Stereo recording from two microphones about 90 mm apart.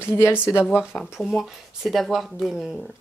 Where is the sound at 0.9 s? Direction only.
Centre (ahead or behind).